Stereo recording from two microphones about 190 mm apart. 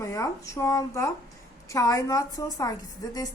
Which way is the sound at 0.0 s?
15° left (ahead or behind).